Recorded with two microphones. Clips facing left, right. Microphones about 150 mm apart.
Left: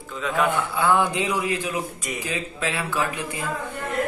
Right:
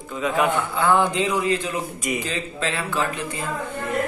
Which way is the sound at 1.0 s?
15° left (ahead or behind).